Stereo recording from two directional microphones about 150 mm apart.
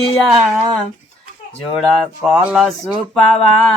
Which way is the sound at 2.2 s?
5° right (ahead or behind).